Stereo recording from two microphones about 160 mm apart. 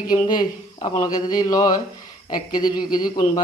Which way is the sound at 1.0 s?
25° left (ahead or behind).